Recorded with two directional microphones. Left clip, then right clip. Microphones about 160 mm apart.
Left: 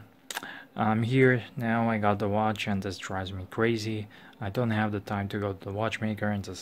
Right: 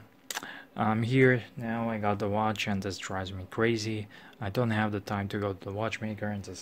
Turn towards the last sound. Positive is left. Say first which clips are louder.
# left 4 dB
turn(degrees=15)  # may be behind; listen again after turning